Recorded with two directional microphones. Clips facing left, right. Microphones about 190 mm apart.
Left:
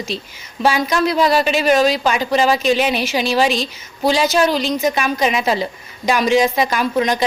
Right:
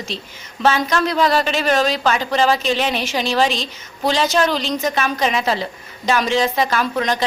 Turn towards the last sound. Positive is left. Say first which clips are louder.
# left 2 dB
turn(degrees=15)  # may be behind; listen again after turning